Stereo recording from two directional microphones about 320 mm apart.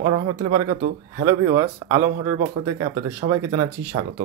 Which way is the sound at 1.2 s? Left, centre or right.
Centre.